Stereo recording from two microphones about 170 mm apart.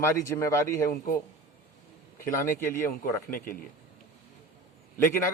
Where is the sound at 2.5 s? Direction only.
15° left (ahead or behind).